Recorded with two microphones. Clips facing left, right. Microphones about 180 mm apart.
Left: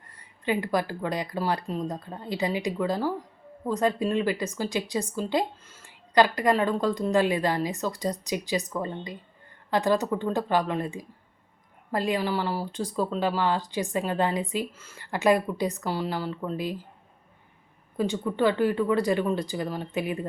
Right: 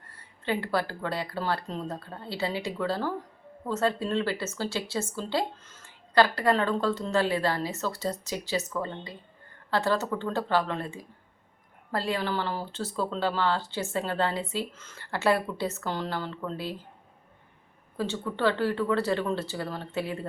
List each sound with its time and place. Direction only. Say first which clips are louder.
0.4 s speech: left 2 dB; 15° left (ahead or behind)
17.9 s speech: left 4 dB; 15° left (ahead or behind)